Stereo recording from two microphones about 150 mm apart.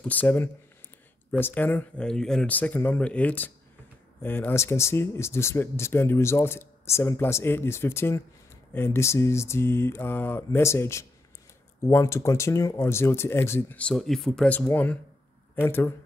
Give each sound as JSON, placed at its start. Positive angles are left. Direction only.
{"t": 0.0, "sound": "speech", "side_deg": 10}